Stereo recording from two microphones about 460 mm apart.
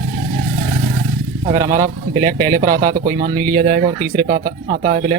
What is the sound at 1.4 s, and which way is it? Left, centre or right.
Speech, centre.